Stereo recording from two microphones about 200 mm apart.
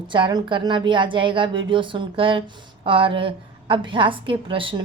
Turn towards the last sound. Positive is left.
turn(degrees=-25)  # may be behind; listen again after turning